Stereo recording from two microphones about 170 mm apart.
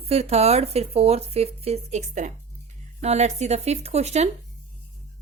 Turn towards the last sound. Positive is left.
turn(degrees=-40)  # may be behind; listen again after turning